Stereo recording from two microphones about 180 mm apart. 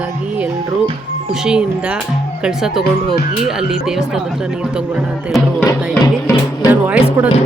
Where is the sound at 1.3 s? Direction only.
5° right (ahead or behind).